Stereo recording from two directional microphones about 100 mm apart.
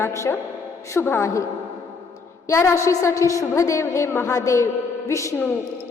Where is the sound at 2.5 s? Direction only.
30° left (ahead or behind).